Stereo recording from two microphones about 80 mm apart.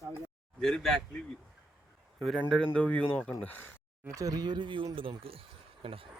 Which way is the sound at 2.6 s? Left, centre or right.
Centre.